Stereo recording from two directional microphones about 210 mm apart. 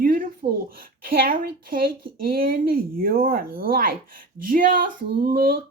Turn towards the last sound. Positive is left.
turn(degrees=-45)  # may be behind; listen again after turning